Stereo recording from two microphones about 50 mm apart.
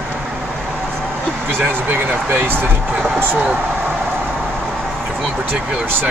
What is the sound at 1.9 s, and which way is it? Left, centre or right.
Speech, right.